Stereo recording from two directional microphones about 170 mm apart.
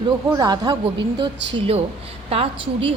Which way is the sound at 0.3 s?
20° right (ahead or behind).